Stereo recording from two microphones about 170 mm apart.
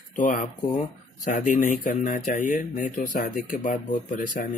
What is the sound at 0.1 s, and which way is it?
Speech, 50° left (ahead or behind).